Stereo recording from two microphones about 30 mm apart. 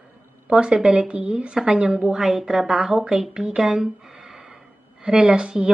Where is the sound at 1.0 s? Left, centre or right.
Right.